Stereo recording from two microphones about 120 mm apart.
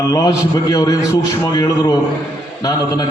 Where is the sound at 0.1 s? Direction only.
30° left (ahead or behind).